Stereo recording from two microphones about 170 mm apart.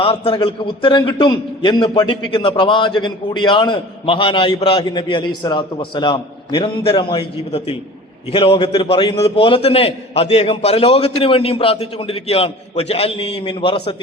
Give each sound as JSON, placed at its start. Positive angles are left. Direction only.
{"t": 0.0, "sound": "a man's voice", "side_deg": 35}